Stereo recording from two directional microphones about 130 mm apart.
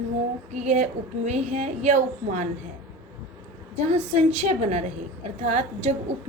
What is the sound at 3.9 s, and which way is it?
A woman's voice, 55° right (ahead or behind).